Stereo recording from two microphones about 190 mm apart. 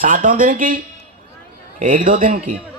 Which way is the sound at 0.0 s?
45° right (ahead or behind).